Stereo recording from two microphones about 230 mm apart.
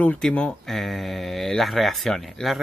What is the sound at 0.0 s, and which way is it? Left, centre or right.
Speech, centre.